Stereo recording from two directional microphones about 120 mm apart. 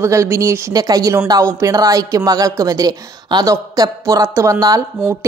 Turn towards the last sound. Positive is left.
turn(degrees=-30)  # may be behind; listen again after turning